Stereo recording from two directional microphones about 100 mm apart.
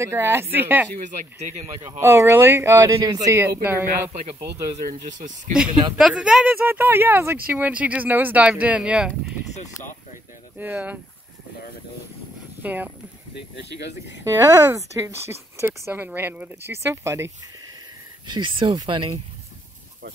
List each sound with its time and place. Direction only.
0.0 s speech: 25° right (ahead or behind)
5.9 s speech: 5° right (ahead or behind)
10.6 s speech: 15° right (ahead or behind)
12.6 s speech: 15° right (ahead or behind)
14.2 s speech: 25° right (ahead or behind)
18.2 s speech: 50° right (ahead or behind)